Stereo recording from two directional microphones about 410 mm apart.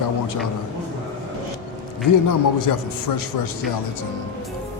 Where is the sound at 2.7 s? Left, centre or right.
Left.